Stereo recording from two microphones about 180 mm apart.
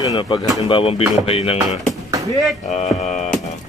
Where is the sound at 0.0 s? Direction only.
25° left (ahead or behind).